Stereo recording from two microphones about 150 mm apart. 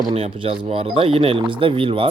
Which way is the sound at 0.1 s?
40° right (ahead or behind).